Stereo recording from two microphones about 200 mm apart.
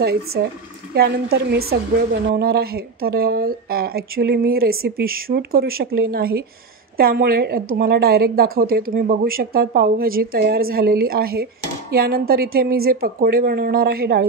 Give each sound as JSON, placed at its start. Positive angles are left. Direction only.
{"t": 0.0, "sound": "a woman's voice", "side_deg": -50}